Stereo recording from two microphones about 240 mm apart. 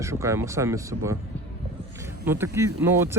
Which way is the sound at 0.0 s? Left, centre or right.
Centre.